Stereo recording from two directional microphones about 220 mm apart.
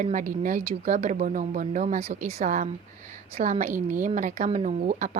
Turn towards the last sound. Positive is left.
turn(degrees=-35)  # may be behind; listen again after turning